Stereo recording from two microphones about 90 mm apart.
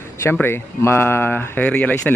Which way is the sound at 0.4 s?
25° left (ahead or behind).